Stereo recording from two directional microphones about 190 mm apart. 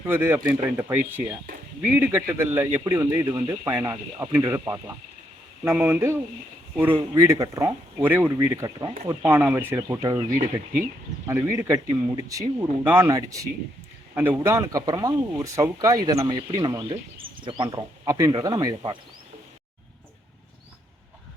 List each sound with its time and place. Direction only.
0.1 s a man's voice: 15° right (ahead or behind)